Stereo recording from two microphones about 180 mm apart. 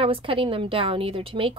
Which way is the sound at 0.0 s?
30° right (ahead or behind).